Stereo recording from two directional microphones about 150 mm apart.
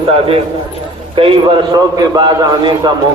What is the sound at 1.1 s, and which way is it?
A man's voice, 35° right (ahead or behind).